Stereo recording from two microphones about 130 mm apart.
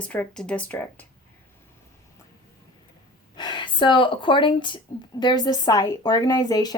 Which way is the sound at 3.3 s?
35° left (ahead or behind).